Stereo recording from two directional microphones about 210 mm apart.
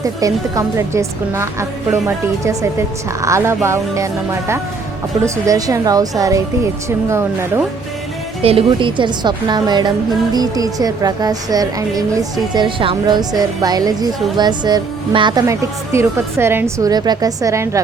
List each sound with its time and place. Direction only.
0.0 s a woman's voice: 15° right (ahead or behind)
8.4 s a woman's voice: 25° right (ahead or behind)